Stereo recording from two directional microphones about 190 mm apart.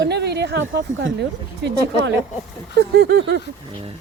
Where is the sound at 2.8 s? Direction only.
60° right (ahead or behind).